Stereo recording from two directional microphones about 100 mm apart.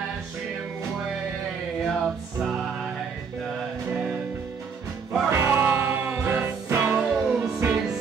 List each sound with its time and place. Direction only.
1.9 s music: 5° right (ahead or behind)
5.3 s music: 25° right (ahead or behind)